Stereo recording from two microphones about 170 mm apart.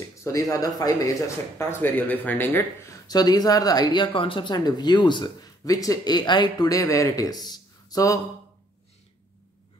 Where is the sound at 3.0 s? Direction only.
25° left (ahead or behind).